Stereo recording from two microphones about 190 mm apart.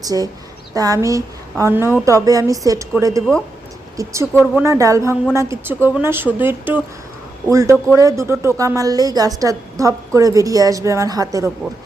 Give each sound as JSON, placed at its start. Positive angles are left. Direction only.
{"t": 0.0, "sound": "a woman's voice", "side_deg": -20}